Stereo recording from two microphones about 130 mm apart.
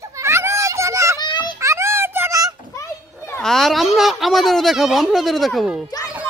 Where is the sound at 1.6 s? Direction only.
20° right (ahead or behind).